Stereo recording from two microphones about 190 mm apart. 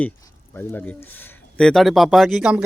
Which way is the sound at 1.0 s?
10° left (ahead or behind).